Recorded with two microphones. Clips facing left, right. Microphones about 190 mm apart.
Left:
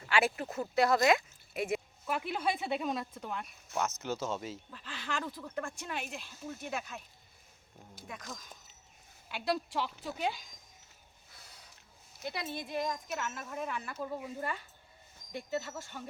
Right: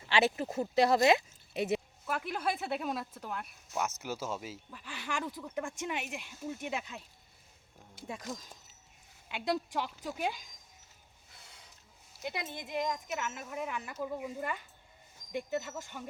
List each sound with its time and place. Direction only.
0.1 s speech: 25° right (ahead or behind)
2.0 s speech: centre (ahead or behind); by 7.0 s 20° right (ahead or behind)
8.0 s speech: 25° right (ahead or behind); by 10.4 s 10° right (ahead or behind)
12.2 s speech: 15° right (ahead or behind)